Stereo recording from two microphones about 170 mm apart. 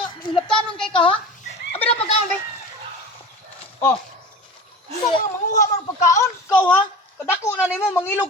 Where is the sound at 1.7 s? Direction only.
35° left (ahead or behind).